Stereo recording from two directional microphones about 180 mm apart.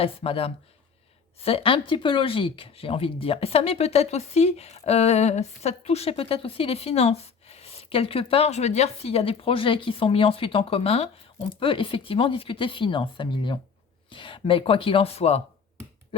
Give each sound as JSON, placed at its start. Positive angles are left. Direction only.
{"t": 0.0, "sound": "speech", "side_deg": 30}